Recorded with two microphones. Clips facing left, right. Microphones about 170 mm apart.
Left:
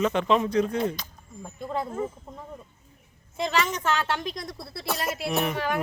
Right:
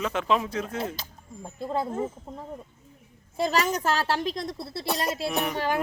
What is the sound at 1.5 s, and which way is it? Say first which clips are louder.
Speech: right 2 dB; 30° right (ahead or behind).